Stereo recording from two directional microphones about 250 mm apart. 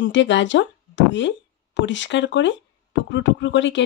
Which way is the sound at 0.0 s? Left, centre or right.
Left.